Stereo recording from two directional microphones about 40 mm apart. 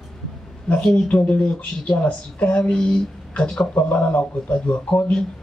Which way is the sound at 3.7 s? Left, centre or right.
Left.